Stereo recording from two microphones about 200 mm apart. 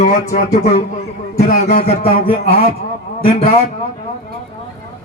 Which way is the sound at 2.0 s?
30° left (ahead or behind).